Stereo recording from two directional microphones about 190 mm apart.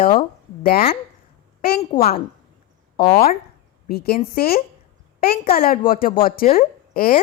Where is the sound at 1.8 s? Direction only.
30° left (ahead or behind).